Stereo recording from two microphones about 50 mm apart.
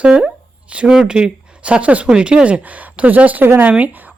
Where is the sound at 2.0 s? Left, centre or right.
Centre.